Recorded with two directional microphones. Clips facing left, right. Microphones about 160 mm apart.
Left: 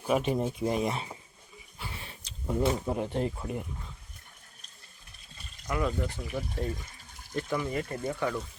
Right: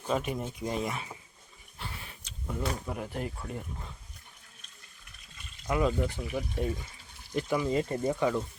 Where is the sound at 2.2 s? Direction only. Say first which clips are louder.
Left 7 dB; 30° left (ahead or behind).